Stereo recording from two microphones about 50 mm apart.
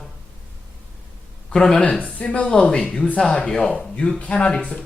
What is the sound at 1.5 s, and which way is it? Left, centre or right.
Speech, centre.